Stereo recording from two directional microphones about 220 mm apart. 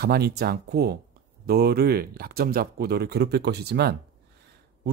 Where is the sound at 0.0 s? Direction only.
45° right (ahead or behind).